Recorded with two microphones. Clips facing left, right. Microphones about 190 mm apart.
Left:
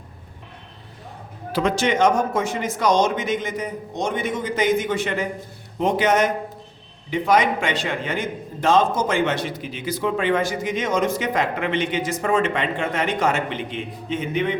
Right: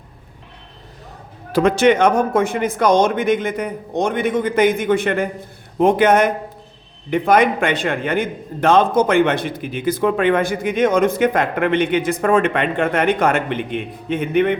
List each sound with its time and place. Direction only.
1.5 s a man's voice: 55° right (ahead or behind)